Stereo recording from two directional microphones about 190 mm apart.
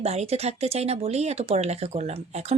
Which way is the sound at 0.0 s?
35° right (ahead or behind).